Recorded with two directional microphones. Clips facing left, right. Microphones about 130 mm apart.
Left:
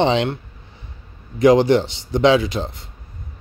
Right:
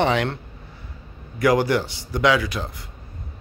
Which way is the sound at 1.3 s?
20° left (ahead or behind).